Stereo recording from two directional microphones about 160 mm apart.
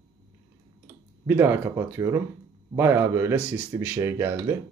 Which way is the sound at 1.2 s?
15° right (ahead or behind).